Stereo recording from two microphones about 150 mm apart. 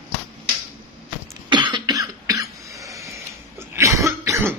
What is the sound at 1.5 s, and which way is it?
Cough, 30° right (ahead or behind).